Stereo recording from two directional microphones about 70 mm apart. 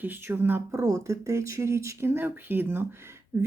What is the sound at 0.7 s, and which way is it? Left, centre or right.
Speech, right.